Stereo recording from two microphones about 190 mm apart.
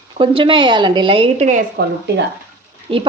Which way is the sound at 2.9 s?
30° right (ahead or behind).